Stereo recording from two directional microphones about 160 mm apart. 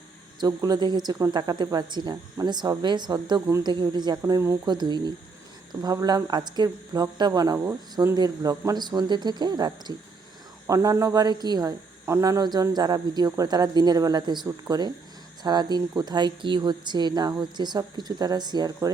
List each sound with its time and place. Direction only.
0.3 s speech: 25° right (ahead or behind)